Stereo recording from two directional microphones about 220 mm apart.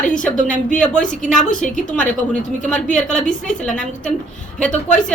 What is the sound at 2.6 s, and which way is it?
A woman's voice, 5° left (ahead or behind).